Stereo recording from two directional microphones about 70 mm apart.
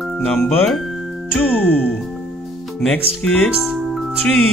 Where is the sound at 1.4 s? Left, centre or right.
Centre.